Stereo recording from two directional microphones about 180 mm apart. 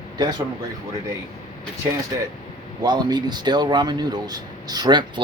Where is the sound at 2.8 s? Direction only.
25° right (ahead or behind).